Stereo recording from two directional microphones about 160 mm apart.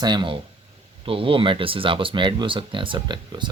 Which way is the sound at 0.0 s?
30° right (ahead or behind).